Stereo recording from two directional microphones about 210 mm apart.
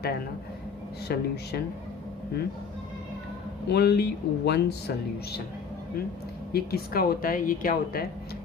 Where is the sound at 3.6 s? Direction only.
50° left (ahead or behind).